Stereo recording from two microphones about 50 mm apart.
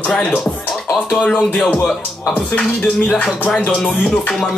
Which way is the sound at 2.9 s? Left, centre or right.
Centre.